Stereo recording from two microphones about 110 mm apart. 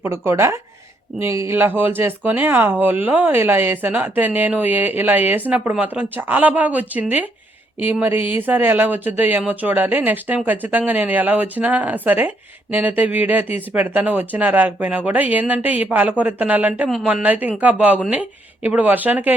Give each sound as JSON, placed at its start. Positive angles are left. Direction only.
{"t": 0.0, "sound": "speech", "side_deg": -25}